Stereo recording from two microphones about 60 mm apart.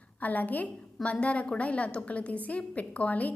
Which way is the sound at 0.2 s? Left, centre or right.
Left.